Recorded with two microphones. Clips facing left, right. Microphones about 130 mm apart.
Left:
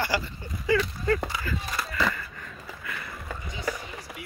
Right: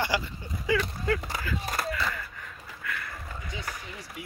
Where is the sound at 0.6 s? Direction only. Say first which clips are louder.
Left 3 dB; 5° right (ahead or behind).